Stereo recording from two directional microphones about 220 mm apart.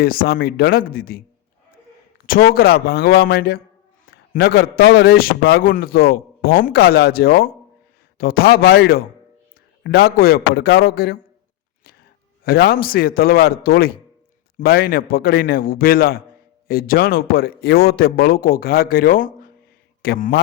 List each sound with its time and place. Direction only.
0.0 s a man's voice: 40° left (ahead or behind)
2.2 s a man's voice: 40° left (ahead or behind)
12.5 s a man's voice: 45° left (ahead or behind)